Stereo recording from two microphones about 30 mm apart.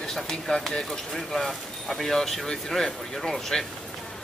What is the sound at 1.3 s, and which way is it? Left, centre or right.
Speech, centre.